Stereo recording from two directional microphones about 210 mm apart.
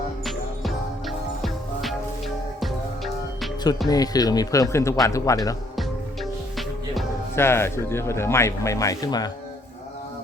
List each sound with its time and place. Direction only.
0.3 s music: centre (ahead or behind)
3.8 s speech: 20° left (ahead or behind)
7.3 s speech: 10° left (ahead or behind)